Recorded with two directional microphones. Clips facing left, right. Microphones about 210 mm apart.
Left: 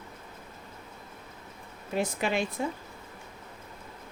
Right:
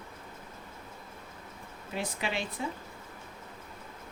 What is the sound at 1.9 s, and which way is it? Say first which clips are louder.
Speech: left 6 dB; 50° left (ahead or behind).